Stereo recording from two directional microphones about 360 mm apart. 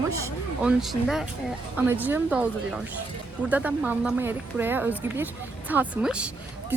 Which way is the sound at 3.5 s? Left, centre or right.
Centre.